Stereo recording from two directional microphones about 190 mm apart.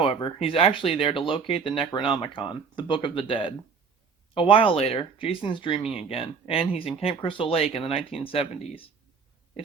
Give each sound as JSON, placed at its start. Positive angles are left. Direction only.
{"t": 0.0, "sound": "speech", "side_deg": 25}
{"t": 5.8, "sound": "speech", "side_deg": -5}
{"t": 6.1, "sound": "speech", "side_deg": 30}